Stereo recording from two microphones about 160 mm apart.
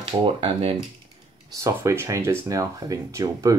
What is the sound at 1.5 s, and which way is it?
Speech, 15° right (ahead or behind).